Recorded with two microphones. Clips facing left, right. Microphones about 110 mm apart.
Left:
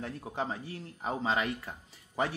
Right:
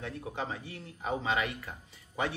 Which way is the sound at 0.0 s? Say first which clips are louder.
Left 1 dB; 35° left (ahead or behind).